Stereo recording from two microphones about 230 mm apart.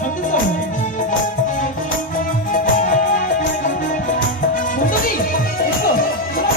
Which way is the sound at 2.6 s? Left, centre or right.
Left.